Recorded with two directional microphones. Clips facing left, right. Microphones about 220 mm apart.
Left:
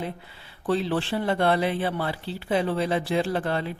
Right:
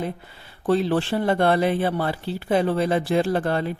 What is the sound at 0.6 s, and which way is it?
A woman's voice, 45° right (ahead or behind).